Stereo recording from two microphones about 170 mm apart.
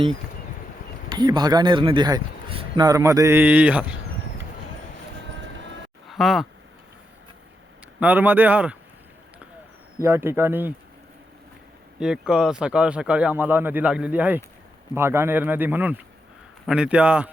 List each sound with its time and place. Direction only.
1.1 s speech: 25° right (ahead or behind); by 3.8 s 10° right (ahead or behind)
6.1 s speech: centre (ahead or behind)
7.9 s speech: 10° right (ahead or behind)
10.0 s speech: 15° right (ahead or behind)
11.9 s speech: 5° right (ahead or behind)